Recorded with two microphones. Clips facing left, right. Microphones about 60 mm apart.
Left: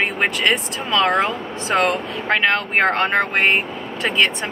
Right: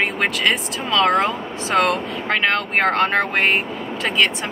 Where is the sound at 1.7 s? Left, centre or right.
Centre.